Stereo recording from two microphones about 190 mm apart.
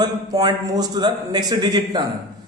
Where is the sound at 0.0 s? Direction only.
20° right (ahead or behind).